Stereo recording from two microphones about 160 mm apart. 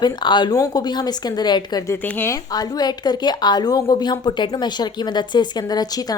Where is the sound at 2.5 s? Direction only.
25° left (ahead or behind).